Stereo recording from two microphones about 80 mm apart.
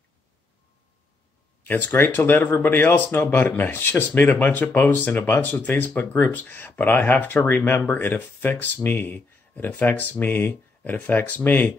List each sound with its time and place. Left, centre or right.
1.6 s speech: left